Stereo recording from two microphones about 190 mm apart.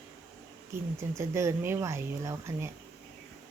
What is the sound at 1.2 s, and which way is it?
Speech, 15° right (ahead or behind).